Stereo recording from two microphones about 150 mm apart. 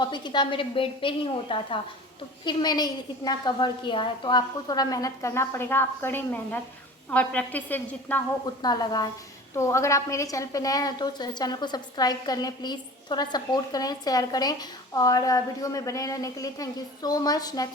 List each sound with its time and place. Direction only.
0.0 s a woman's voice: 30° left (ahead or behind); by 8.2 s 10° left (ahead or behind)
8.6 s a woman's voice: 25° left (ahead or behind)